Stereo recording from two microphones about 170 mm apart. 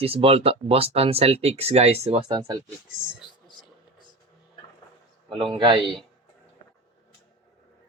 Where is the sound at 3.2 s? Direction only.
30° left (ahead or behind).